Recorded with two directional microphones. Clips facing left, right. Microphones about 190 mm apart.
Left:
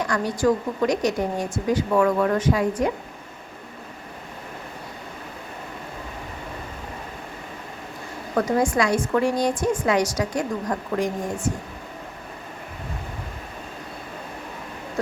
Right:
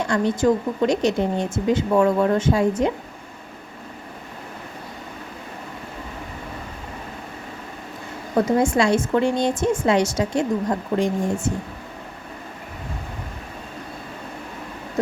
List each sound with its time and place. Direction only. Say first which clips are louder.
0.0 s speech: right 2 dB; 25° right (ahead or behind)
8.4 s speech: right 3 dB; 25° right (ahead or behind)